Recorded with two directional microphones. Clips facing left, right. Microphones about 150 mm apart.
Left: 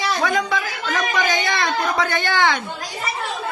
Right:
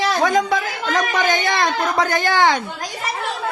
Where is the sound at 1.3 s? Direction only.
45° right (ahead or behind).